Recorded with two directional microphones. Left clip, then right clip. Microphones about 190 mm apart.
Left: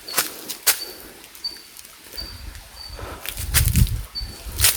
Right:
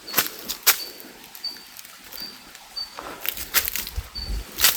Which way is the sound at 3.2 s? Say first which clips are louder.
Even; 15° right (ahead or behind).